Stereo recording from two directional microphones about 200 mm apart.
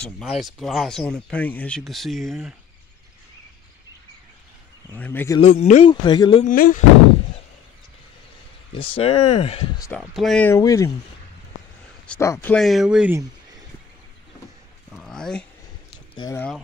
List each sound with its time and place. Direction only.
0.0 s speech: centre (ahead or behind)
4.9 s speech: 10° left (ahead or behind)
5.4 s speech: 35° left (ahead or behind)
6.4 s speech: 45° left (ahead or behind)
8.7 s speech: 25° left (ahead or behind)
9.9 s speech: centre (ahead or behind)
12.1 s speech: 10° left (ahead or behind)
12.5 s speech: centre (ahead or behind)
15.0 s a sound: centre (ahead or behind)
16.3 s speech: 5° left (ahead or behind)